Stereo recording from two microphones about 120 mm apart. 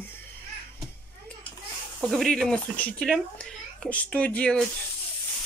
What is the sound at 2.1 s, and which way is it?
Speech, centre (ahead or behind).